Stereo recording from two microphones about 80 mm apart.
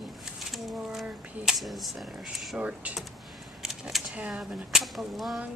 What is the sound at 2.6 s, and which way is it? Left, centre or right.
Speech, centre.